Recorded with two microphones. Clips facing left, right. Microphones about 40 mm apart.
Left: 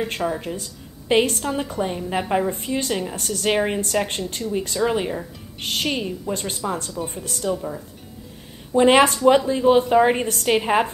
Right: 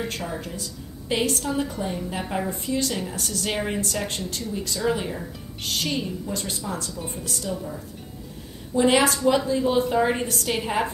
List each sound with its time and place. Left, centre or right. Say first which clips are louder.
0.4 s a woman's voice: left 3 dB; left
2.5 s a woman's voice: left 2 dB; left
8.7 s a woman's voice: left 5 dB; left